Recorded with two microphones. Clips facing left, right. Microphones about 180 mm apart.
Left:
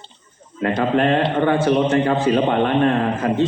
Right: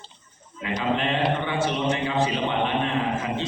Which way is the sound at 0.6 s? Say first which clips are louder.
Left 8 dB; 50° left (ahead or behind).